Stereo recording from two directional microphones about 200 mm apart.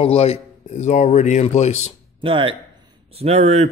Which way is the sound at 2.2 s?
25° right (ahead or behind).